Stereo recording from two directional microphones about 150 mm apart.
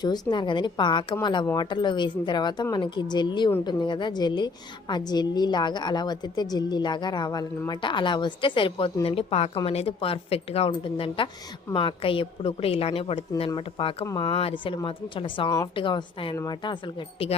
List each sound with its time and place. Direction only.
0.0 s a woman's voice: 30° left (ahead or behind)